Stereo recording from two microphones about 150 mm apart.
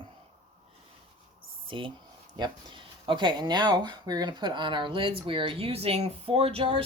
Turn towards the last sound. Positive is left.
turn(degrees=-40)  # may be behind; listen again after turning